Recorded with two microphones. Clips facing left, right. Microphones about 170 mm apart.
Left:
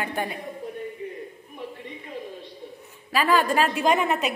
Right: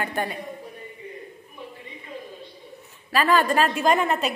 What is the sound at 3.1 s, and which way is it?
A woman's voice, 10° left (ahead or behind).